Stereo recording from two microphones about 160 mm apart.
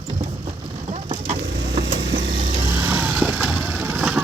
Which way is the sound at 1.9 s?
90° right.